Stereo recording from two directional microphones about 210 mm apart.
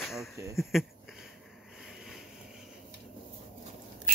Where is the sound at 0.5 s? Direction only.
Centre (ahead or behind).